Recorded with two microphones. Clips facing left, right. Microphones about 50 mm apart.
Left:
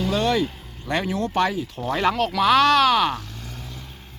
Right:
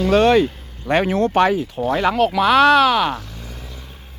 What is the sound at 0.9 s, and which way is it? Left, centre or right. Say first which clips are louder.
Speech: right 7 dB; right.